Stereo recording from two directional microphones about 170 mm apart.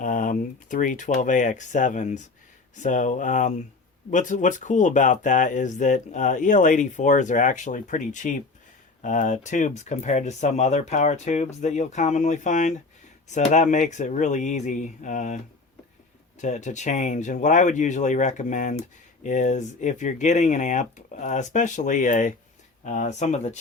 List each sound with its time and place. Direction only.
0.0 s speech: 50° left (ahead or behind)
16.4 s speech: 45° left (ahead or behind)